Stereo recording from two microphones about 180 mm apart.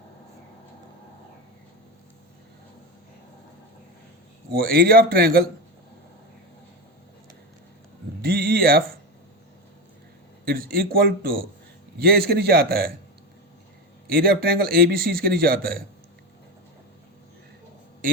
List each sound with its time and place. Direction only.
4.5 s a man's voice: 55° right (ahead or behind)
8.2 s music: 55° right (ahead or behind)
10.4 s a man's voice: 55° right (ahead or behind)
14.1 s a man's voice: 55° right (ahead or behind)